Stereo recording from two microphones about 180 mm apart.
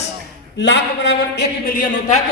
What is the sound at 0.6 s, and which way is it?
A woman's voice, 75° left (ahead or behind).